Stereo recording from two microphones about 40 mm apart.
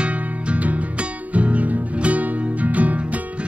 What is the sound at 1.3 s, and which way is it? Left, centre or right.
Music, right.